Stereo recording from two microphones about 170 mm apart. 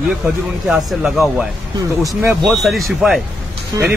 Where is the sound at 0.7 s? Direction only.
Centre (ahead or behind).